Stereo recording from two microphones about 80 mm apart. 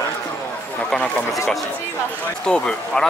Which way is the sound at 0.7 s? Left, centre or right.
Centre.